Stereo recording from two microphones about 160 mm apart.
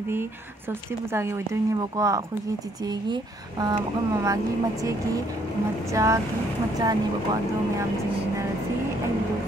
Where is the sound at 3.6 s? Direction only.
20° right (ahead or behind).